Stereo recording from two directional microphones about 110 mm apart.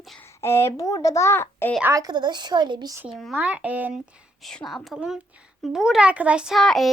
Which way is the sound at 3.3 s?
10° right (ahead or behind).